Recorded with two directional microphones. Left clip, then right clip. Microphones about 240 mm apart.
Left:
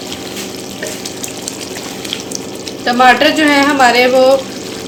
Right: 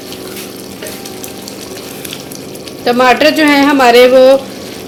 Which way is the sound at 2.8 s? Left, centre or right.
Right.